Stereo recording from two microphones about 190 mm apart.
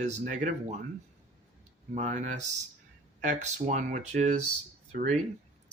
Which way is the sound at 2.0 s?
40° right (ahead or behind).